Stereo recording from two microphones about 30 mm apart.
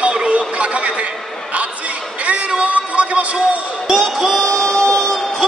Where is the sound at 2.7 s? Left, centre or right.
Right.